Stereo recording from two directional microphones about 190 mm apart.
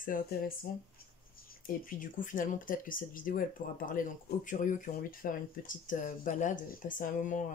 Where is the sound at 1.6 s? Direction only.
45° left (ahead or behind).